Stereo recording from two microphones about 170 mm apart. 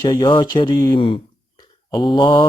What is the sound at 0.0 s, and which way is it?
Speech, 25° left (ahead or behind).